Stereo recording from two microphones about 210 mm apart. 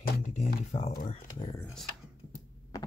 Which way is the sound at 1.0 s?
30° left (ahead or behind).